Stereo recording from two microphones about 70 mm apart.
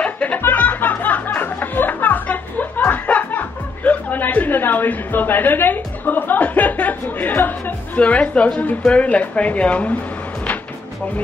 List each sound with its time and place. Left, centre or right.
0.0 s music: centre
8.8 s speech: centre